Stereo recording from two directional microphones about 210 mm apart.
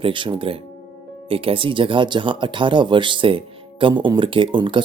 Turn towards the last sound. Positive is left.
turn(degrees=-25)  # may be behind; listen again after turning